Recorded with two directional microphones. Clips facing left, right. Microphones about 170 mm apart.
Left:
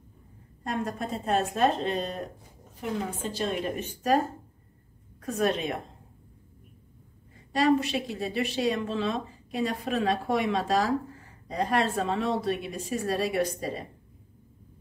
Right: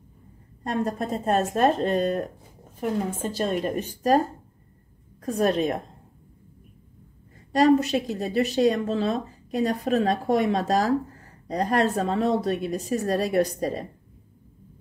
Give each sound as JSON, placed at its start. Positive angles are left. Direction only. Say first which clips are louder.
{"t": 0.7, "sound": "a woman's voice", "louder": "right 5 dB", "side_deg": -35}
{"t": 5.2, "sound": "speech", "louder": "right 4 dB", "side_deg": -40}
{"t": 7.5, "sound": "speech", "louder": "right 5 dB", "side_deg": -40}